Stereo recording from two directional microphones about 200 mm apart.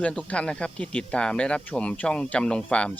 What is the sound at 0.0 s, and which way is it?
Speech, 5° left (ahead or behind).